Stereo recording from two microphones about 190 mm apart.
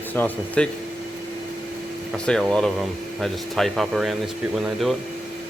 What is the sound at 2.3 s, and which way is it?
Speech, 5° left (ahead or behind).